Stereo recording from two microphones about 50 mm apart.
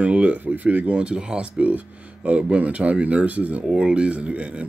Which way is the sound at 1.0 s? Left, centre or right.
Right.